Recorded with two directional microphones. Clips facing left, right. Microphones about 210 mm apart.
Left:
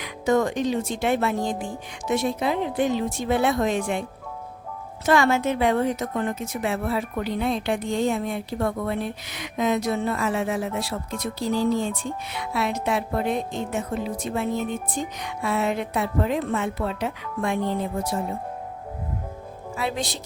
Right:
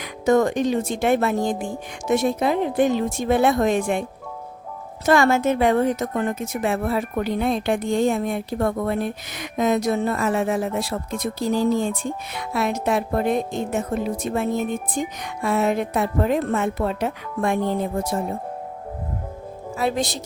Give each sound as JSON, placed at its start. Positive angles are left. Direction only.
{"t": 0.0, "sound": "a woman's voice", "side_deg": -45}
{"t": 5.0, "sound": "a woman's voice", "side_deg": -45}
{"t": 19.7, "sound": "a woman's voice", "side_deg": -45}